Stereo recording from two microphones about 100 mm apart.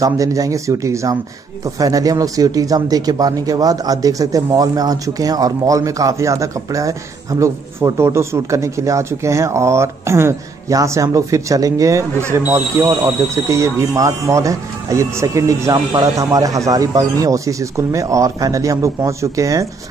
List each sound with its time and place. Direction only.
0.0 s speech: 35° right (ahead or behind)